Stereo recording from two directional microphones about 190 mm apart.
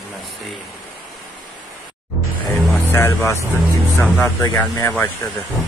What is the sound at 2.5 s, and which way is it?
Music, centre (ahead or behind).